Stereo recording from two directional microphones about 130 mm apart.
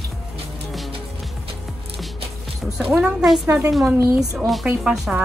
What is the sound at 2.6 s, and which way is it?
Music, 5° right (ahead or behind).